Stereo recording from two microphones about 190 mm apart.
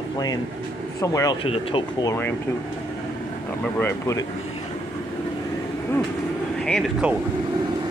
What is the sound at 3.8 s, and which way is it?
Speech, 15° left (ahead or behind).